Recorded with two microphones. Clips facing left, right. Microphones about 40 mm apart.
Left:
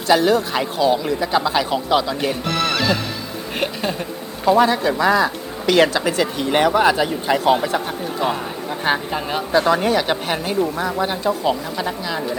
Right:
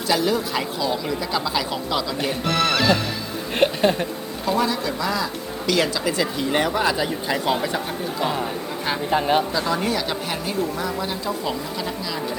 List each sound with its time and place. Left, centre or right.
0.1 s a woman's voice: left
0.6 s a woman's voice: left
2.2 s speech: centre
4.6 s a woman's voice: left
6.6 s speech: left
9.0 s speech: centre
9.5 s a woman's voice: left